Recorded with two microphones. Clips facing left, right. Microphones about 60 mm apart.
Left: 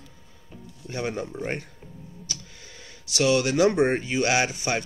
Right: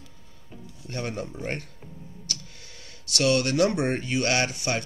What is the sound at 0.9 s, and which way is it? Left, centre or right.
Speech, centre.